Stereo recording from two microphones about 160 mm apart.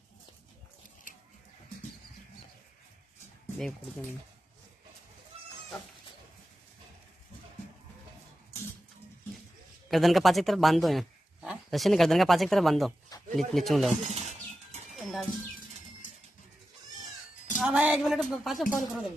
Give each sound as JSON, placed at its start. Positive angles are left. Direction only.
{"t": 9.8, "sound": "speech", "side_deg": 0}
{"t": 14.0, "sound": "a sound", "side_deg": -45}
{"t": 15.0, "sound": "bird", "side_deg": 0}
{"t": 17.6, "sound": "speech", "side_deg": -5}